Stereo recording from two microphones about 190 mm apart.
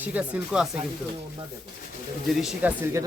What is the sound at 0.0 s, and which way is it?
Speech, 5° right (ahead or behind).